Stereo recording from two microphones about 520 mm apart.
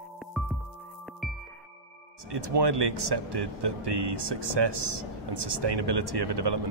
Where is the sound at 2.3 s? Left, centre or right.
Right.